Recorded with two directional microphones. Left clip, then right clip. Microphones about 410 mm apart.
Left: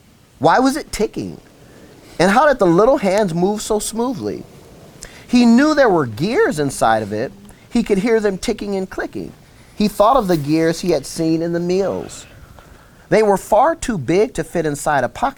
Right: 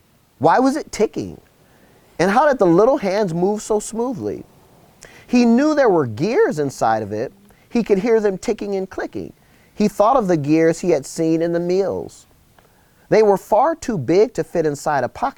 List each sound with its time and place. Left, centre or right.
0.3 s speech: right